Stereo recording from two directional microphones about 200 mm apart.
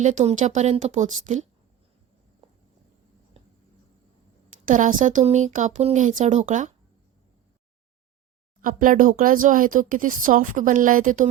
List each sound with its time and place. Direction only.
0.0 s speech: 35° right (ahead or behind)
2.4 s walk: 25° right (ahead or behind)
4.6 s speech: 40° right (ahead or behind)
8.6 s speech: 40° right (ahead or behind)